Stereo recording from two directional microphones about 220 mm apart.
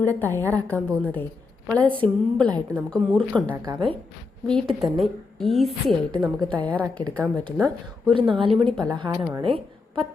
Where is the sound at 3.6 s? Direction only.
20° right (ahead or behind).